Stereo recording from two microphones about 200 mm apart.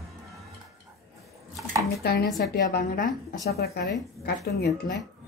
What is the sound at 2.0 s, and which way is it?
A woman's voice, 50° left (ahead or behind).